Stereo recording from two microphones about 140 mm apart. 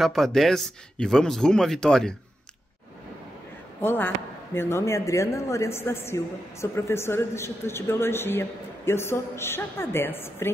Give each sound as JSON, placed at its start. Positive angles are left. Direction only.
{"t": 0.0, "sound": "speech", "side_deg": 0}
{"t": 3.8, "sound": "a woman's voice", "side_deg": 15}